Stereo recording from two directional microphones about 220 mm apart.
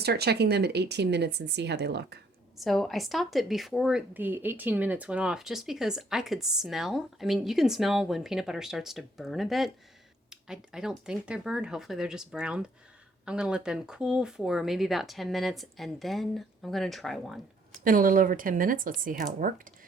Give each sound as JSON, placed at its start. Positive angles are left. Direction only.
{"t": 0.0, "sound": "speech", "side_deg": -45}
{"t": 2.6, "sound": "a woman's voice", "side_deg": 0}
{"t": 17.7, "sound": "speech", "side_deg": -40}